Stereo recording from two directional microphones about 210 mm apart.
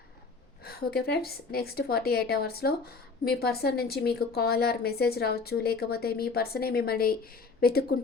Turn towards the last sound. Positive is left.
turn(degrees=45)  # may be behind; listen again after turning